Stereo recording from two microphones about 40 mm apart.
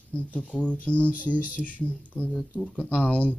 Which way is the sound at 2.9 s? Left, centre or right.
Left.